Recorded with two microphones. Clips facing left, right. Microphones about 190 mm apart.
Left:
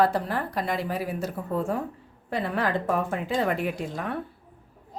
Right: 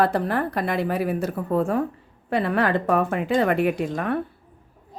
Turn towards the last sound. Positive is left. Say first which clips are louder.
# right 7 dB
turn(degrees=-65)  # may be behind; listen again after turning